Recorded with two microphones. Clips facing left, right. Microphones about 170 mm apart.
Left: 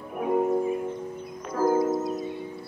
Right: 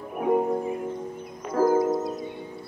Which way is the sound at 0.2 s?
25° right (ahead or behind).